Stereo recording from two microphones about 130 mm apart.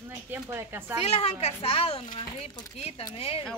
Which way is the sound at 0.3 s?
15° right (ahead or behind).